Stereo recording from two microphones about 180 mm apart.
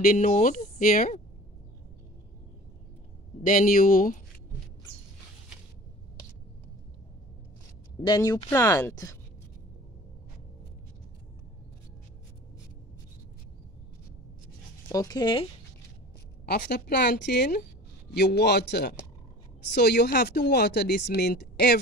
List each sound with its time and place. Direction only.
0.0 s speech: 45° left (ahead or behind)
3.4 s speech: 50° left (ahead or behind)
8.0 s speech: 20° left (ahead or behind)
14.9 s speech: 20° left (ahead or behind)
16.4 s speech: 60° left (ahead or behind)